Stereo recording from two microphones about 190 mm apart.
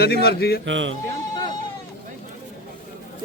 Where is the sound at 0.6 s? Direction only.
75° right (ahead or behind).